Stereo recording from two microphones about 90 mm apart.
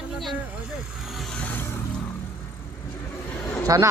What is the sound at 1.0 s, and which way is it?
Vehicle, centre (ahead or behind).